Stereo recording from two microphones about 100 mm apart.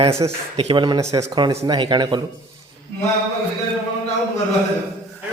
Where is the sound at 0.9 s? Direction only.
40° right (ahead or behind).